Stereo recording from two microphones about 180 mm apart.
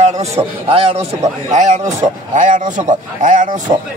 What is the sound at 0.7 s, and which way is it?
A man's voice, 30° right (ahead or behind).